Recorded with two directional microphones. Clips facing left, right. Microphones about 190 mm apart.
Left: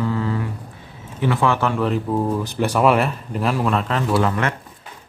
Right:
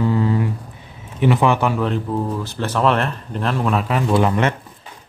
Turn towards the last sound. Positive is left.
turn(degrees=-20)  # may be behind; listen again after turning